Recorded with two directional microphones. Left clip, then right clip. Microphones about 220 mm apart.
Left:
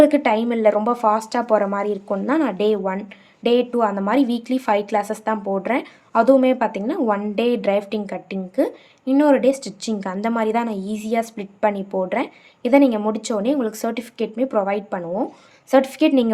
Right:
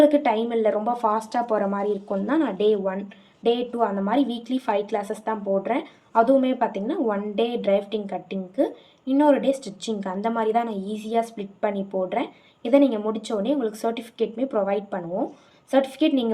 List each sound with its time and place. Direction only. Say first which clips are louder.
0.0 s a woman's voice: left 3 dB; 30° left (ahead or behind)